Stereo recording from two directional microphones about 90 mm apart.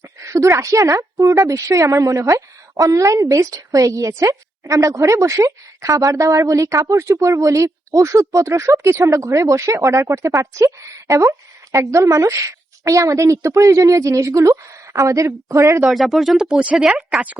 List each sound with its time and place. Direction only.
0.3 s a woman's voice: 35° right (ahead or behind)
15.9 s speech: centre (ahead or behind)